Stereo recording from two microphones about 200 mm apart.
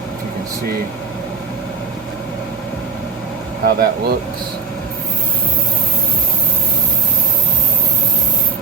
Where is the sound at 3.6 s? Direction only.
50° right (ahead or behind).